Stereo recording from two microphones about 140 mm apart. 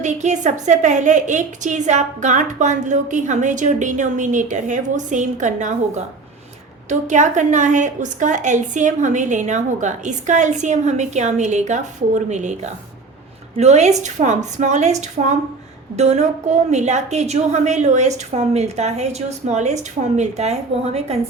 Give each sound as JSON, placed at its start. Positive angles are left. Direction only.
{"t": 0.0, "sound": "a woman's voice", "side_deg": -55}
{"t": 7.1, "sound": "a woman's voice", "side_deg": -60}